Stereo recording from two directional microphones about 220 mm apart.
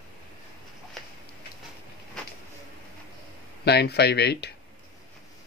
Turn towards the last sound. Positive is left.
turn(degrees=50)  # may be behind; listen again after turning